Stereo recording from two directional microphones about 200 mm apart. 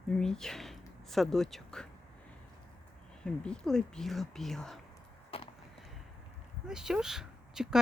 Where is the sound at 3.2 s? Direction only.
5° left (ahead or behind).